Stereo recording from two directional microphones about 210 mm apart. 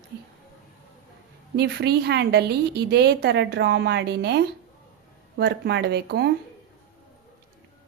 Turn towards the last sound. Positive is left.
turn(degrees=-50)  # may be behind; listen again after turning